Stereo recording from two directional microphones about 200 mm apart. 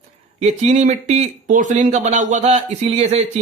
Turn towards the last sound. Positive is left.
turn(degrees=-30)  # may be behind; listen again after turning